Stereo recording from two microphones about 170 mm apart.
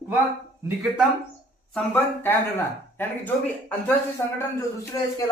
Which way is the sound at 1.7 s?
10° left (ahead or behind).